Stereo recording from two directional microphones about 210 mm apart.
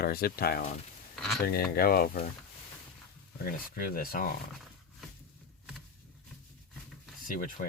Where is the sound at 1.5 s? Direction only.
45° left (ahead or behind).